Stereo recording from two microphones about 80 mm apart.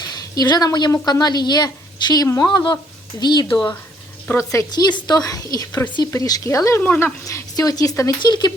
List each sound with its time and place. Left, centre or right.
0.0 s a sound: left
1.0 s speech: left
2.2 s speech: left
2.5 s speech: left
4.3 s speech: left
4.7 s a woman's voice: left
8.2 s speech: left